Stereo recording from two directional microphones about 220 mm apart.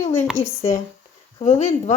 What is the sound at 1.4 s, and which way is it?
Speech, 35° left (ahead or behind).